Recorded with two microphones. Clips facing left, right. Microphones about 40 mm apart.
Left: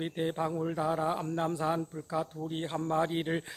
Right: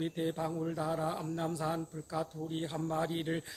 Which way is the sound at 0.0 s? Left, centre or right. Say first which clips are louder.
Left 3 dB; left.